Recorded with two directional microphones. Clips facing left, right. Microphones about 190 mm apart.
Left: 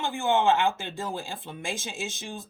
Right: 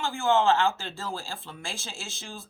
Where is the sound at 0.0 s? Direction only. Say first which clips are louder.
Even; 20° left (ahead or behind).